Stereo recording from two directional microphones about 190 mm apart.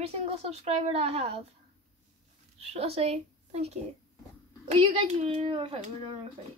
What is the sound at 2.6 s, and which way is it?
Speech, 30° right (ahead or behind).